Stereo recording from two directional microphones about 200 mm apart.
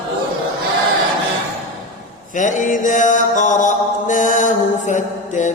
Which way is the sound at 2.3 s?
40° left (ahead or behind).